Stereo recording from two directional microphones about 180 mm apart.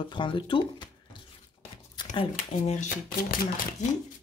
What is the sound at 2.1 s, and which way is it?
Speech, 35° left (ahead or behind).